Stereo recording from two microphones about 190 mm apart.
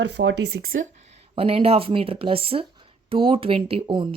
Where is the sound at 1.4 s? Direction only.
30° right (ahead or behind).